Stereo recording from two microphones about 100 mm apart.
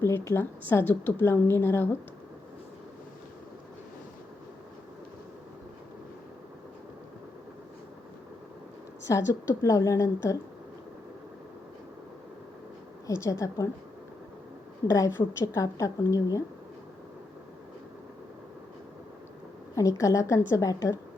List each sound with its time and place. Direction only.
0.0 s a woman's voice: 25° left (ahead or behind)
9.0 s a woman's voice: 30° left (ahead or behind)
13.1 s a woman's voice: 30° left (ahead or behind)
14.8 s a woman's voice: 35° left (ahead or behind)
19.7 s a woman's voice: 35° left (ahead or behind)